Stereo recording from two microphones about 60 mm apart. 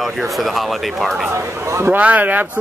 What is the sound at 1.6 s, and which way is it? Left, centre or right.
Speech, right.